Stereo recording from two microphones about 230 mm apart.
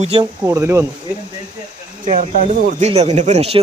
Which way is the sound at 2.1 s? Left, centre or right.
Right.